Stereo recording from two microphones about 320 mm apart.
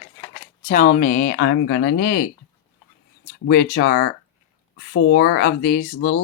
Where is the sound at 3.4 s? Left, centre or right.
Left.